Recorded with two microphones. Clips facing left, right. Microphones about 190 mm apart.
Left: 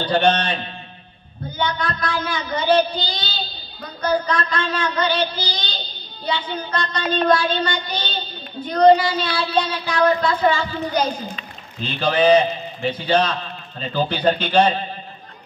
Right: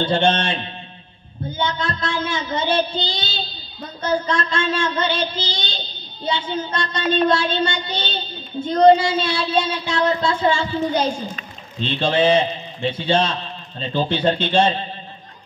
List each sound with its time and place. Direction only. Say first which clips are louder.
0.0 s child singing: even; 25° right (ahead or behind)
1.6 s child singing: even; 25° right (ahead or behind)